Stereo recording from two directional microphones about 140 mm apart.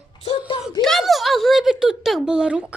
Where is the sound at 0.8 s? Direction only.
Centre (ahead or behind).